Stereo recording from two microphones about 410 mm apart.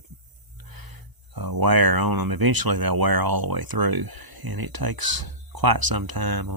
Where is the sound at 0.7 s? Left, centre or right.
Right.